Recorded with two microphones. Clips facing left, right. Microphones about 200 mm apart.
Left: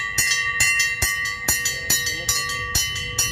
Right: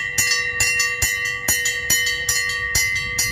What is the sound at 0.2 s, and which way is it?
Train, 35° right (ahead or behind).